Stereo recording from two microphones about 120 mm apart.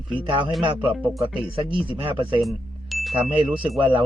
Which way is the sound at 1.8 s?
45° right (ahead or behind).